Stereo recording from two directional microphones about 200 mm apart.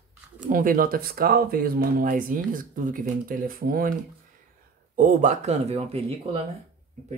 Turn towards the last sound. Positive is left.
turn(degrees=-30)  # may be behind; listen again after turning